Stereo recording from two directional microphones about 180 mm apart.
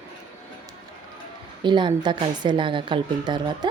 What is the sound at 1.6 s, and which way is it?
A woman's voice, 25° right (ahead or behind).